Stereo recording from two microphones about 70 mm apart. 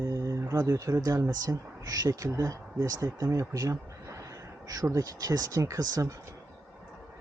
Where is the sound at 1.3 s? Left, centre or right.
Right.